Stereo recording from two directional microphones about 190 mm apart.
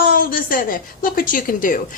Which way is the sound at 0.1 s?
50° left (ahead or behind).